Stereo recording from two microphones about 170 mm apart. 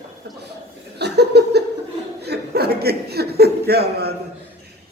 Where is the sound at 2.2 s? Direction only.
70° right (ahead or behind).